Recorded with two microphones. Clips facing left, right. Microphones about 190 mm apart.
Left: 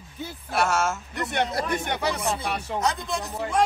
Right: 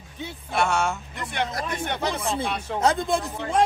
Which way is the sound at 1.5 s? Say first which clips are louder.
Left 3 dB; 30° left (ahead or behind).